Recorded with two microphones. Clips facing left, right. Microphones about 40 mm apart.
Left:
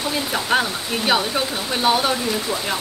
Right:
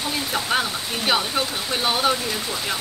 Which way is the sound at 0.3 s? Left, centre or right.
Centre.